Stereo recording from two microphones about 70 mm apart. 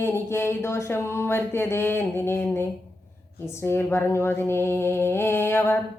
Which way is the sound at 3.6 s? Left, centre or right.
Left.